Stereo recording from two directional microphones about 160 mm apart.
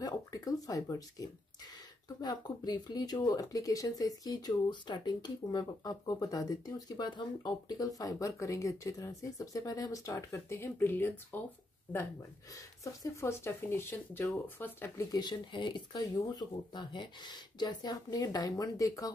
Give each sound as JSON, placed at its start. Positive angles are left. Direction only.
{"t": 0.0, "sound": "speech", "side_deg": 25}
{"t": 12.5, "sound": "speech", "side_deg": 20}
{"t": 15.1, "sound": "speech", "side_deg": 25}